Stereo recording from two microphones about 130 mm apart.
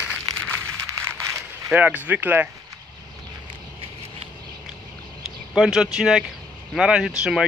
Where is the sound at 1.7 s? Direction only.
15° right (ahead or behind).